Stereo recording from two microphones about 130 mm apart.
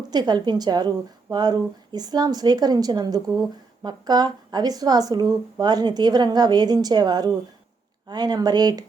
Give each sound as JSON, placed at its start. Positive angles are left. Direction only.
{"t": 0.1, "sound": "a woman's voice", "side_deg": -30}